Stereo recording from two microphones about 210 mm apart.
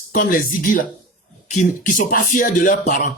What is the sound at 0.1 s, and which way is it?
Speech, 40° left (ahead or behind).